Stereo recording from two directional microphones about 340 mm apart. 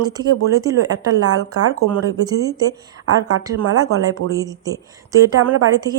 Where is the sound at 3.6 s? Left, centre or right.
Right.